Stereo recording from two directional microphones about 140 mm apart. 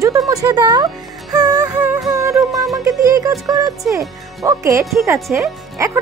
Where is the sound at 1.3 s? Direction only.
25° right (ahead or behind).